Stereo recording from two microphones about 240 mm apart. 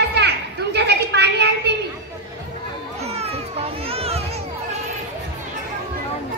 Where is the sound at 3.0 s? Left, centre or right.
Right.